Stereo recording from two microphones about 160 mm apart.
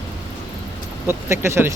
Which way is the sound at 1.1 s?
15° right (ahead or behind).